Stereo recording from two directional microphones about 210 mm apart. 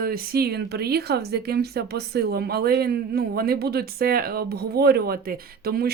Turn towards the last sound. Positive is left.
turn(degrees=-45)  # may be behind; listen again after turning